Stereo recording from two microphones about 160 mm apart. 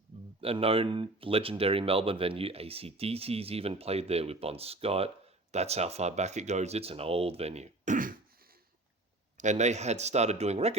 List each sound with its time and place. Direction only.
0.4 s speech: 35° right (ahead or behind); by 8.1 s 55° right (ahead or behind)
9.4 s speech: 45° right (ahead or behind)